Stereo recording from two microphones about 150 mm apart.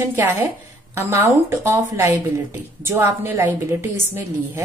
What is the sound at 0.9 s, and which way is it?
A woman's voice, 20° right (ahead or behind).